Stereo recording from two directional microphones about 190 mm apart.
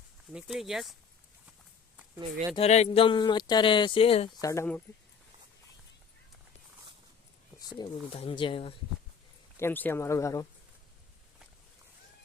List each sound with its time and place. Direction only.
0.3 s speech: centre (ahead or behind)
2.6 s speech: 35° left (ahead or behind)
4.4 s speech: 15° left (ahead or behind)
7.6 s speech: 25° left (ahead or behind)
9.6 s speech: 10° left (ahead or behind)